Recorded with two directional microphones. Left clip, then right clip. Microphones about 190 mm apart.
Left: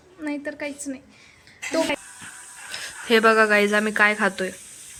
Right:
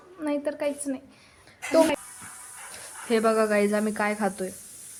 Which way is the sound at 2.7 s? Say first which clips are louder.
Left 6 dB; 5° left (ahead or behind).